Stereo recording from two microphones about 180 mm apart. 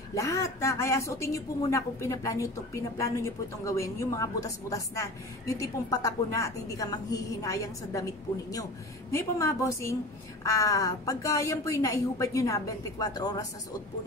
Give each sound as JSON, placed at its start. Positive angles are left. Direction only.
{"t": 0.1, "sound": "a woman's voice", "side_deg": 15}